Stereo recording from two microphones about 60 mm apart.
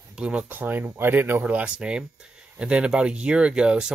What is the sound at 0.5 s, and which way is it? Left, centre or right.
Speech, right.